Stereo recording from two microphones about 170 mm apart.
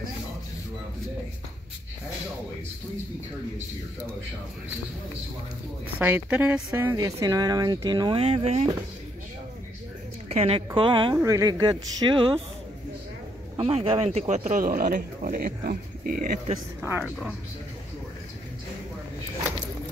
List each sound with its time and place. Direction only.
5.9 s a woman's voice: 10° right (ahead or behind); by 8.7 s 40° right (ahead or behind)
10.2 s a woman's voice: 40° right (ahead or behind)
13.6 s speech: 35° right (ahead or behind); by 16.3 s 55° right (ahead or behind)
16.8 s speech: 10° right (ahead or behind)